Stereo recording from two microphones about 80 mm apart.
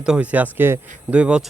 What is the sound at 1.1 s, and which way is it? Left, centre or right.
Speech, centre.